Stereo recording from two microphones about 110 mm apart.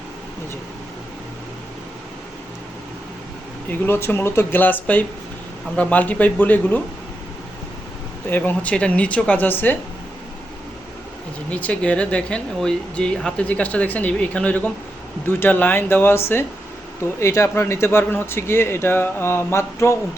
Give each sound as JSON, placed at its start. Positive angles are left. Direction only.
{"t": 3.7, "sound": "a man's voice", "side_deg": 20}
{"t": 8.3, "sound": "speech", "side_deg": 15}
{"t": 11.5, "sound": "a man's voice", "side_deg": 10}